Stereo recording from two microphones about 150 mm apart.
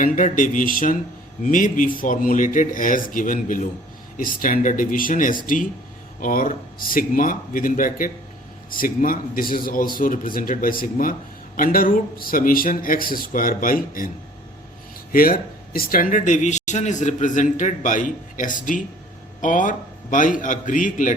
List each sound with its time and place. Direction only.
0.0 s speech: 60° left (ahead or behind)
4.2 s speech: 70° left (ahead or behind)
15.1 s speech: 75° left (ahead or behind)